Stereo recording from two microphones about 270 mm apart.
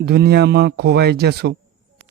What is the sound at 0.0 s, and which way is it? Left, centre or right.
Speech, right.